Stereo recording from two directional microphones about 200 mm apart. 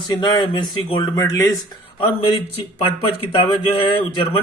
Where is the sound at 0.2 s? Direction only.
25° left (ahead or behind).